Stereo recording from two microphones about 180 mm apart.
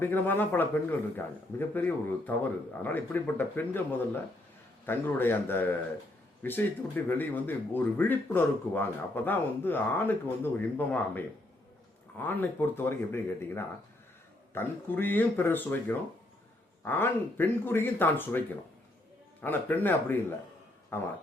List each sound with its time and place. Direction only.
0.0 s speech: 10° left (ahead or behind)